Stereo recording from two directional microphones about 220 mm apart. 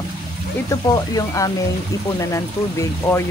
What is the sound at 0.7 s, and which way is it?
Speech, 15° left (ahead or behind).